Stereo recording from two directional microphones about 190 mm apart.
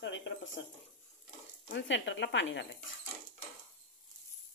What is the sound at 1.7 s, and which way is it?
Speech, 70° left (ahead or behind).